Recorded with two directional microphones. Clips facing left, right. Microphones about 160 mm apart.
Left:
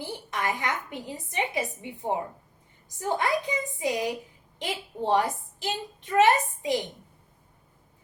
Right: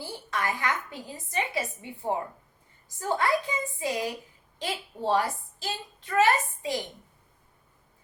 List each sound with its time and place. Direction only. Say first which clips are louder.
0.0 s a woman's voice: left 1 dB; 20° left (ahead or behind)